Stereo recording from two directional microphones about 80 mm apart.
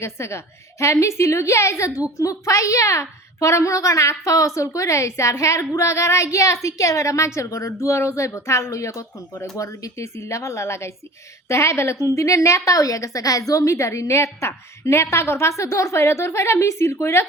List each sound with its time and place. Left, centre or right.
0.0 s a woman's voice: left